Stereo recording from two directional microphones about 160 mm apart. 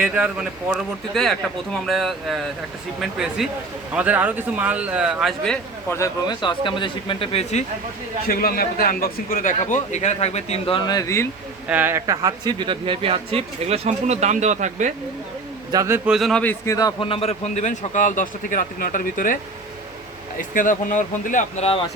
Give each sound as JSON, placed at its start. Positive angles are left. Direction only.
{"t": 0.0, "sound": "a man's voice", "side_deg": -5}
{"t": 5.9, "sound": "speech", "side_deg": 25}
{"t": 8.3, "sound": "a man's voice", "side_deg": 70}
{"t": 11.7, "sound": "speech", "side_deg": -15}
{"t": 15.7, "sound": "a man's voice", "side_deg": -20}
{"t": 16.0, "sound": "a man's voice", "side_deg": 0}
{"t": 16.4, "sound": "a man's voice", "side_deg": 10}
{"t": 16.7, "sound": "a man's voice", "side_deg": 30}
{"t": 20.5, "sound": "speech", "side_deg": 55}